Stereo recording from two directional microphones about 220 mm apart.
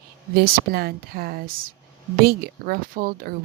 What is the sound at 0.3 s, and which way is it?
Speech, 45° right (ahead or behind).